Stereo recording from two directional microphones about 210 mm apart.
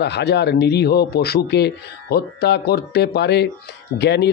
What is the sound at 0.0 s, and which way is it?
Speech, 55° left (ahead or behind).